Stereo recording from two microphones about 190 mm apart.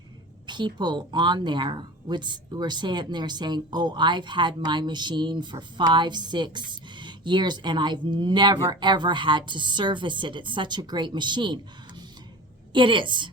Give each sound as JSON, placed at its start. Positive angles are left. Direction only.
{"t": 0.4, "sound": "speech", "side_deg": -25}
{"t": 12.7, "sound": "speech", "side_deg": -25}